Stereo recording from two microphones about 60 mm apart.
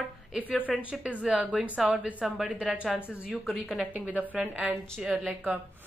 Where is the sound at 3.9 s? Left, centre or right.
Right.